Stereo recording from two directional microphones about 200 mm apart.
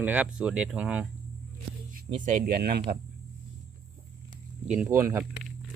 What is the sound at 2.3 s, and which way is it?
Speech, 50° right (ahead or behind).